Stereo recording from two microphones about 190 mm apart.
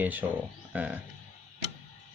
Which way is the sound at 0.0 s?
10° right (ahead or behind).